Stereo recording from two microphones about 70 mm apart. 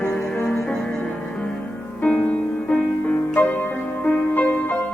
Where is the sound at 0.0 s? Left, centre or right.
Centre.